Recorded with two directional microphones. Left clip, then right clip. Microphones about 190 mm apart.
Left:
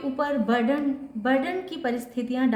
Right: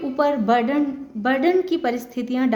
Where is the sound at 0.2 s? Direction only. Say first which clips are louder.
Right 7 dB; 35° right (ahead or behind).